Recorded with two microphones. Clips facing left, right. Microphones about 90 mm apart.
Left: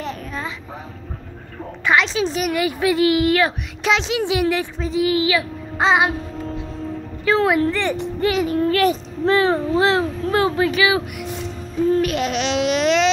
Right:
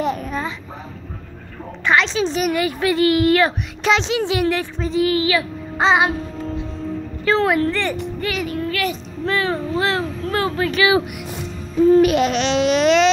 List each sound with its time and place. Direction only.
0.0 s a sound: 10° right (ahead or behind)
1.9 s a woman's voice: 5° left (ahead or behind)
8.0 s a child's voice: 25° left (ahead or behind)
10.8 s babbling: 5° right (ahead or behind)